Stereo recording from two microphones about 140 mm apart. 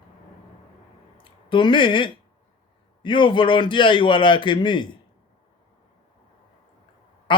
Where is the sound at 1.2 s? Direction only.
35° left (ahead or behind).